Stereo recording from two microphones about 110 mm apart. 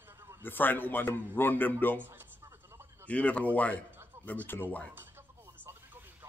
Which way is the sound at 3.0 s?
10° left (ahead or behind).